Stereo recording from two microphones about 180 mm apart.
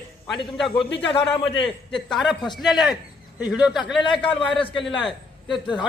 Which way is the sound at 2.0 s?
Centre (ahead or behind).